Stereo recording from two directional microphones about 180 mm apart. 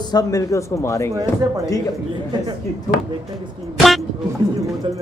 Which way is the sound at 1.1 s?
20° right (ahead or behind).